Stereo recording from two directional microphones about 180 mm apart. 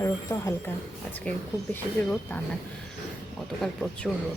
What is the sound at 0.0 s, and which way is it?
Speech, 15° left (ahead or behind).